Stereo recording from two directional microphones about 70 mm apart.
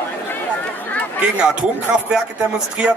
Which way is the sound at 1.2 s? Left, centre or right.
Centre.